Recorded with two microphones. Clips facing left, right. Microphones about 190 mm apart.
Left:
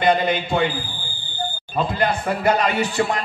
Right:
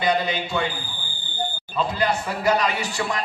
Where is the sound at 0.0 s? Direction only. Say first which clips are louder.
Left 4 dB; 55° left (ahead or behind).